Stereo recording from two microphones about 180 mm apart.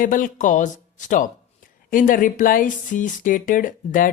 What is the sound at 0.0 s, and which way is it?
Speech, 45° left (ahead or behind).